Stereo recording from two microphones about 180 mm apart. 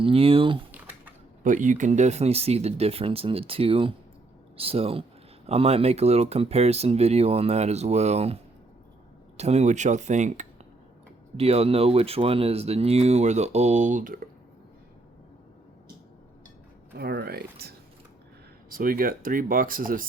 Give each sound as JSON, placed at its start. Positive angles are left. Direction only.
{"t": 0.0, "sound": "speech", "side_deg": -30}
{"t": 0.7, "sound": "typing", "side_deg": -10}
{"t": 1.5, "sound": "speech", "side_deg": -45}
{"t": 9.4, "sound": "speech", "side_deg": -35}
{"t": 17.0, "sound": "speech", "side_deg": -60}